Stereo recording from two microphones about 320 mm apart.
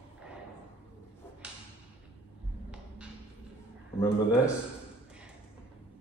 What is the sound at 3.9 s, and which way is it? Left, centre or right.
Speech, centre.